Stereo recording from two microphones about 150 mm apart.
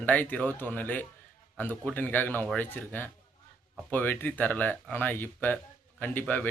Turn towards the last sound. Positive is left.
turn(degrees=10)  # may be behind; listen again after turning